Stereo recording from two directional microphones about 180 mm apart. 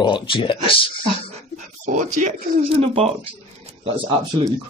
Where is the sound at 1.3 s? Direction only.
40° right (ahead or behind).